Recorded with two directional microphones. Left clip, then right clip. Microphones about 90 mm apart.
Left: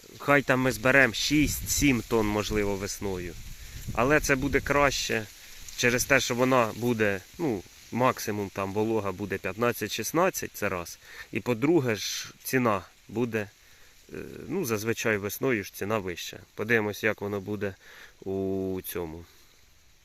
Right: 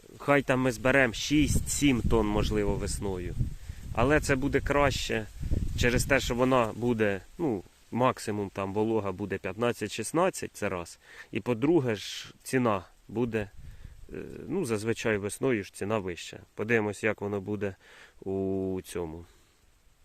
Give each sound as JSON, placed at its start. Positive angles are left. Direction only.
{"t": 0.2, "sound": "speech", "side_deg": -10}
{"t": 2.6, "sound": "speech", "side_deg": -15}
{"t": 7.2, "sound": "speech", "side_deg": -10}
{"t": 18.3, "sound": "speech", "side_deg": -15}